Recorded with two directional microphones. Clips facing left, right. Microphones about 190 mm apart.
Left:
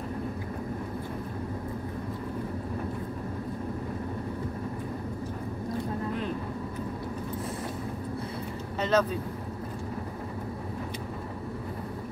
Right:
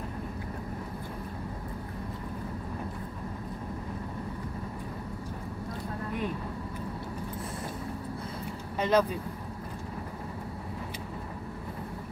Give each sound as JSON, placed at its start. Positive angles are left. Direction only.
{"t": 8.7, "sound": "vehicle", "side_deg": -10}